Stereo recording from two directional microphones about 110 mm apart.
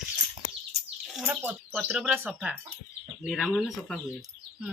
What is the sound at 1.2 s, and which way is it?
Speech, 20° right (ahead or behind).